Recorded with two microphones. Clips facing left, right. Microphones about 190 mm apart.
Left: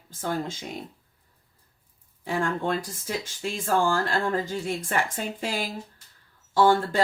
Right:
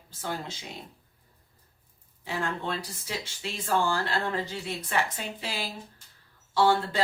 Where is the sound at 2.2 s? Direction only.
50° left (ahead or behind).